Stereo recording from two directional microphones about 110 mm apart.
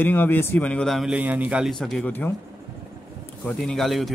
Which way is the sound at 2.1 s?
20° left (ahead or behind).